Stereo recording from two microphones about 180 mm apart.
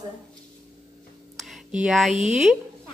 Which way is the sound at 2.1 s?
40° right (ahead or behind).